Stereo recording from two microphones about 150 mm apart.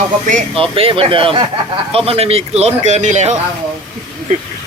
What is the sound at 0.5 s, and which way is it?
Speech, 35° right (ahead or behind).